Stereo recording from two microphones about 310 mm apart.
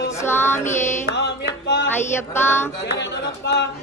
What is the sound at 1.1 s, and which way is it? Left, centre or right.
Singing, left.